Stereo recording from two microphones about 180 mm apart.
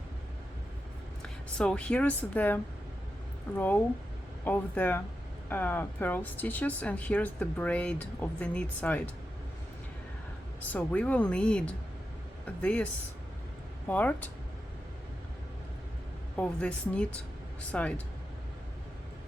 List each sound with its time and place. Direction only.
1.2 s speech: 5° left (ahead or behind)
4.4 s speech: 10° left (ahead or behind)
10.7 s speech: 10° left (ahead or behind)
16.3 s speech: 5° left (ahead or behind)